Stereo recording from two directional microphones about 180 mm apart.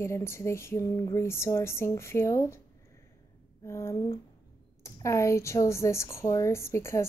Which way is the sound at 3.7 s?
15° left (ahead or behind).